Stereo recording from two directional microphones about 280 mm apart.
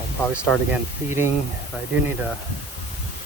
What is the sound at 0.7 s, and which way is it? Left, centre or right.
Speech, centre.